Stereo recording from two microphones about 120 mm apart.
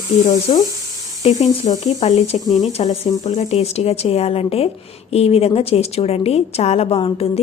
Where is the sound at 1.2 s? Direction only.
70° left (ahead or behind).